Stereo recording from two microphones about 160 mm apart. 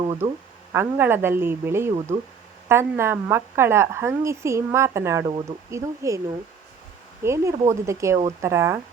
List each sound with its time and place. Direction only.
0.0 s a woman's voice: 20° right (ahead or behind)